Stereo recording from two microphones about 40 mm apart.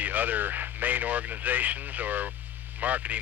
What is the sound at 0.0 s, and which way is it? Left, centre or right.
Speech, right.